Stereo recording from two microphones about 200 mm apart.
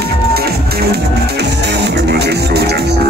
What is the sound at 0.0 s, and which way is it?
Music, 55° right (ahead or behind).